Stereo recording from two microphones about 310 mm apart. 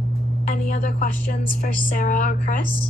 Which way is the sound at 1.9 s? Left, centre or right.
Left.